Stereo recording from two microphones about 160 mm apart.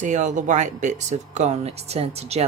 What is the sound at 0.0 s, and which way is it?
Speech, 50° right (ahead or behind).